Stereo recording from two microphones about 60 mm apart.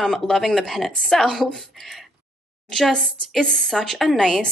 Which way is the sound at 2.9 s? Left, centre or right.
Centre.